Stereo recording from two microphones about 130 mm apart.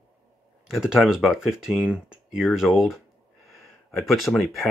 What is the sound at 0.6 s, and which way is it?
Speech, 5° right (ahead or behind).